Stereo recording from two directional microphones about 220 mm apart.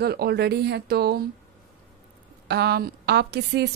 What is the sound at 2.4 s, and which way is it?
A woman's voice, 45° right (ahead or behind).